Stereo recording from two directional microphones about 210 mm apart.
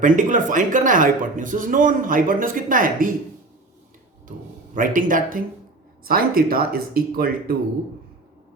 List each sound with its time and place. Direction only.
0.0 s speech: 40° right (ahead or behind)
4.3 s speech: 40° right (ahead or behind)